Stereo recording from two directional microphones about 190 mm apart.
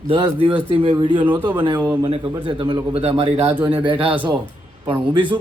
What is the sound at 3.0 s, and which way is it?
A man's voice, 35° right (ahead or behind).